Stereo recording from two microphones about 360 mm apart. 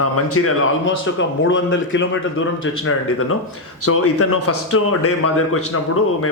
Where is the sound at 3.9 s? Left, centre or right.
Left.